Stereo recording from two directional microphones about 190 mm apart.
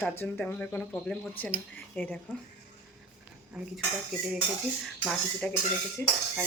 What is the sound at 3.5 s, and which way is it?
Speech, 5° right (ahead or behind).